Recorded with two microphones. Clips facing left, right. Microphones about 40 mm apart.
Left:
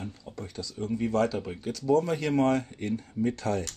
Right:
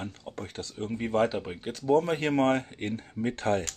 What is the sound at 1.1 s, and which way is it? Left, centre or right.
Speech, right.